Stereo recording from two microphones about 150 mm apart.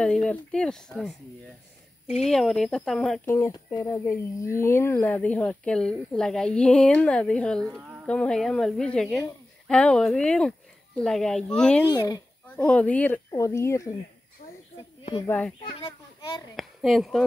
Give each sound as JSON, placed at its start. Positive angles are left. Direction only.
{"t": 0.0, "sound": "speech", "side_deg": 5}
{"t": 2.2, "sound": "speech", "side_deg": 0}
{"t": 3.3, "sound": "speech", "side_deg": 20}
{"t": 7.7, "sound": "speech", "side_deg": -10}
{"t": 8.1, "sound": "speech", "side_deg": 5}
{"t": 11.9, "sound": "speech", "side_deg": 25}
{"t": 12.4, "sound": "speech", "side_deg": 10}
{"t": 15.2, "sound": "speech", "side_deg": 10}
{"t": 16.5, "sound": "speech", "side_deg": 0}